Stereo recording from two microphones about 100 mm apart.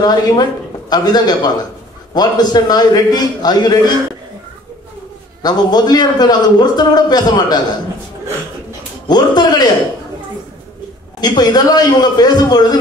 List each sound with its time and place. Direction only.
0.0 s a man's voice: 45° left (ahead or behind)
5.4 s a man's voice: 45° left (ahead or behind)
9.0 s a man's voice: 45° left (ahead or behind)
11.1 s a man's voice: 45° left (ahead or behind)